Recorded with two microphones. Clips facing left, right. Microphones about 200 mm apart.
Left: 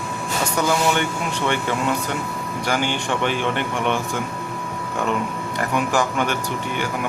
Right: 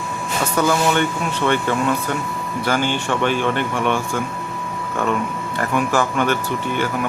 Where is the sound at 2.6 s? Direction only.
15° left (ahead or behind).